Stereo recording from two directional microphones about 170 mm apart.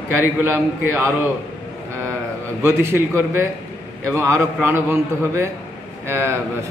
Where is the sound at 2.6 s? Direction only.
15° right (ahead or behind).